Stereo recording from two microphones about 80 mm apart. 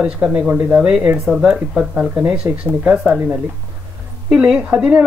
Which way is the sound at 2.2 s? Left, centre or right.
Centre.